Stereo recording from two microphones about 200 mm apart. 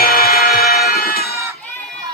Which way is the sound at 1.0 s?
50° left (ahead or behind).